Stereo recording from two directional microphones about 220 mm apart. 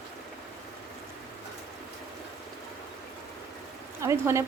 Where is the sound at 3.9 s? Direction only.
10° right (ahead or behind).